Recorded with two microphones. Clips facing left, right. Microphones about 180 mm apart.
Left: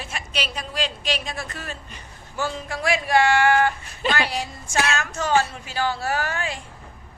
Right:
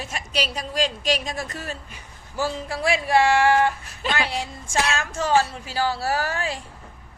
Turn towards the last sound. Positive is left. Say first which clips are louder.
# right 1 dB
turn(degrees=-35)  # may be behind; listen again after turning